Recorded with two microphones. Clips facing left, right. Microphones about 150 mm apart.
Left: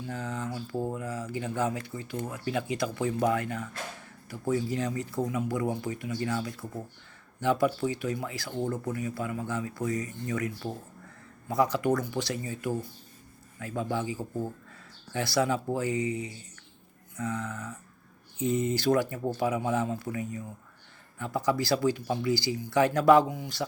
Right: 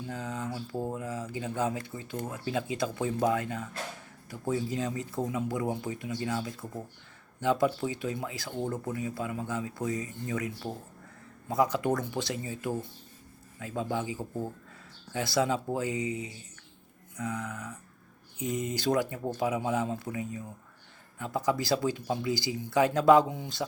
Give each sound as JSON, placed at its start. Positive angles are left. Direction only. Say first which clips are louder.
{"t": 0.1, "sound": "speech", "louder": "left 1 dB", "side_deg": -20}
{"t": 14.2, "sound": "speech", "louder": "left 2 dB", "side_deg": 5}
{"t": 15.1, "sound": "speech", "louder": "left 1 dB", "side_deg": -20}